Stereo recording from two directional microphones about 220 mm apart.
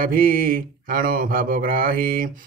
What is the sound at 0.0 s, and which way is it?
Mantra, 40° right (ahead or behind).